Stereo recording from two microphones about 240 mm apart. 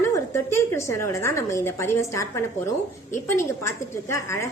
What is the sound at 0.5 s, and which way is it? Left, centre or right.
A woman's voice, centre.